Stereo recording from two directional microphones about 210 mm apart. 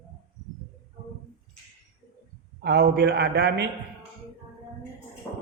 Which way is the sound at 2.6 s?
55° right (ahead or behind).